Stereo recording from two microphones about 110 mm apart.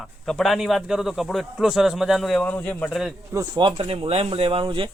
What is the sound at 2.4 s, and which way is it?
Speech, 10° left (ahead or behind).